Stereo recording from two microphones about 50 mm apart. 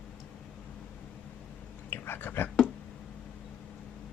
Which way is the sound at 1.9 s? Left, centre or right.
Left.